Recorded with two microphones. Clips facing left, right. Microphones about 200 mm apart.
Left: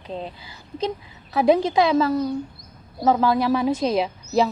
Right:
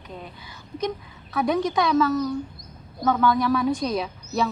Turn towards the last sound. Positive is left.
turn(degrees=25)  # may be behind; listen again after turning